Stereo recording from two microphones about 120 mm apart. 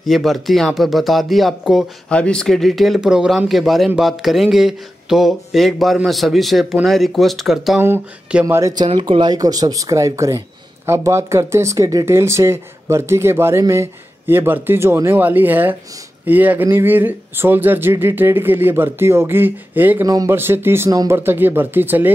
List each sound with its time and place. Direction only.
0.0 s a man's voice: centre (ahead or behind)
2.0 s a man's voice: 10° left (ahead or behind)
7.8 s speech: 15° right (ahead or behind)
8.5 s speech: 25° right (ahead or behind)
8.9 s speech: 40° right (ahead or behind); by 20.1 s 15° right (ahead or behind)
20.1 s speech: 30° right (ahead or behind)
20.3 s speech: 20° right (ahead or behind)